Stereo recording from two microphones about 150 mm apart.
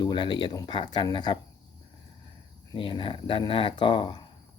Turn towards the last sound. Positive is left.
turn(degrees=30)  # may be behind; listen again after turning